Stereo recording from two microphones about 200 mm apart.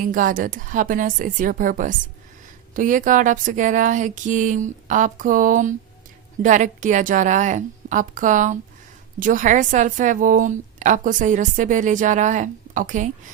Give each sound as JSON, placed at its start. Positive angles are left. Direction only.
{"t": 0.0, "sound": "a woman's voice", "side_deg": -40}